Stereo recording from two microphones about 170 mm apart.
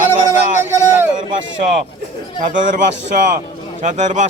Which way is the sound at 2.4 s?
50° right (ahead or behind).